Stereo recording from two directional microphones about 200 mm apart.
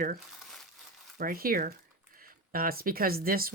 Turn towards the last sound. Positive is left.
turn(degrees=-45)  # may be behind; listen again after turning